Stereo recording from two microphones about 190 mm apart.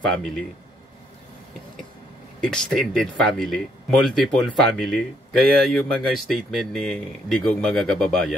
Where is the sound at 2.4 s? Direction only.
5° left (ahead or behind).